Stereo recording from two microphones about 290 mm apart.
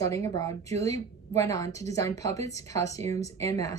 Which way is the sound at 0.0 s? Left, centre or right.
Centre.